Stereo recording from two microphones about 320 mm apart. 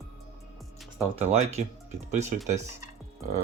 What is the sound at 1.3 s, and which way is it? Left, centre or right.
Speech, centre.